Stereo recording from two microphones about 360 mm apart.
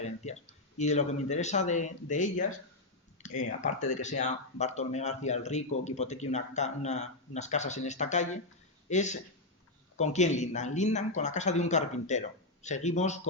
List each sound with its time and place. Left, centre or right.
0.2 s a man's voice: centre